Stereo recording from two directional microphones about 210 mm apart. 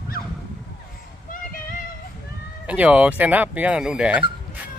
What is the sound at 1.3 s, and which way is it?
Child singing, 40° left (ahead or behind).